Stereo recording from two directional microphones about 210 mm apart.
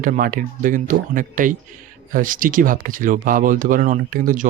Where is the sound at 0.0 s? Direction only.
40° right (ahead or behind).